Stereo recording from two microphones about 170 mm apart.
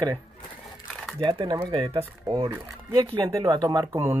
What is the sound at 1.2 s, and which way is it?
Speech, 30° right (ahead or behind).